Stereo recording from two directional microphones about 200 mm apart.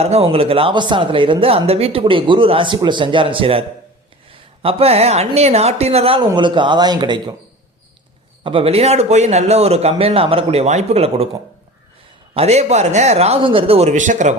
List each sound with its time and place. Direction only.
0.0 s speech: 30° right (ahead or behind)
8.4 s speech: 25° right (ahead or behind)
12.3 s speech: 30° right (ahead or behind)